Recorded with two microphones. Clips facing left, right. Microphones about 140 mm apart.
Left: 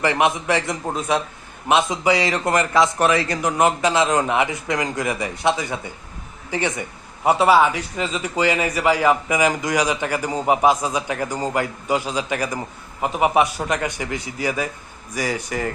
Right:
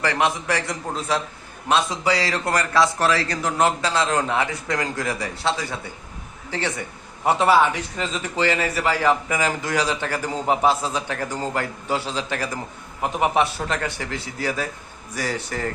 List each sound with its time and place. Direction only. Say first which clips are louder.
0.0 s a man's voice: left 3 dB; 20° left (ahead or behind)